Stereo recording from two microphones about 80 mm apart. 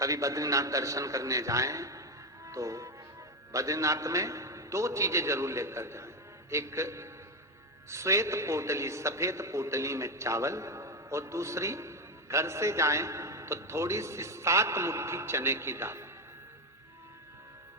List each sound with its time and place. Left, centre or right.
0.0 s a man's voice: right
2.5 s music: right
3.5 s a man's voice: right